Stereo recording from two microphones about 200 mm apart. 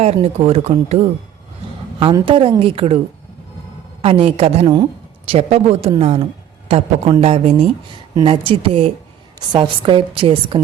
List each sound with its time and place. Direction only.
0.0 s a woman's voice: 35° right (ahead or behind)
4.0 s a woman's voice: 30° right (ahead or behind)